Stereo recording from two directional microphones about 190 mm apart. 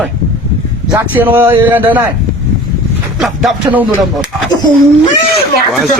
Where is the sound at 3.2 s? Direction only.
Centre (ahead or behind).